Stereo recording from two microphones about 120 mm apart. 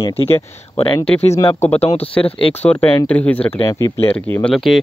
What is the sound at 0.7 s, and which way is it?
Speech, 50° left (ahead or behind).